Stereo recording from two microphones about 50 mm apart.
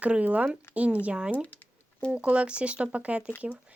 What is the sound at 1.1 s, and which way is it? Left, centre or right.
Speech, centre.